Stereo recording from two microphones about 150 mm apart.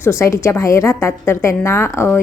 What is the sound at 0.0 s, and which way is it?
A woman's voice, 20° left (ahead or behind).